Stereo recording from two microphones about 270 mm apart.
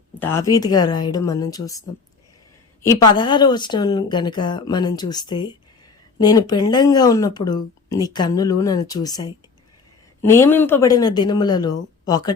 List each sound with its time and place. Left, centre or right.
0.2 s speech: centre
2.8 s speech: centre